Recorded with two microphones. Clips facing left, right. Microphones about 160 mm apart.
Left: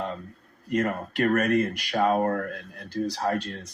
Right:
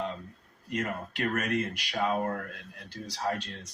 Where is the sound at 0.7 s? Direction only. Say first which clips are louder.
Left 7 dB; 55° left (ahead or behind).